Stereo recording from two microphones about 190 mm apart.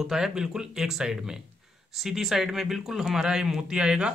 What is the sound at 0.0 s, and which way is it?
Speech, centre (ahead or behind).